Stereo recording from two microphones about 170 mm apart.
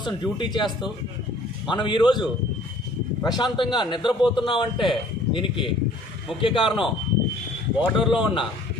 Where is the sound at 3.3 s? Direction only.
25° left (ahead or behind).